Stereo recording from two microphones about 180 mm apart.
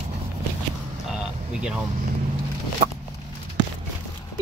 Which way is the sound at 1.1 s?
5° right (ahead or behind).